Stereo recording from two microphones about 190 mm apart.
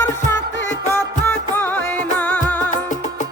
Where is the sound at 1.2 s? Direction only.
10° left (ahead or behind).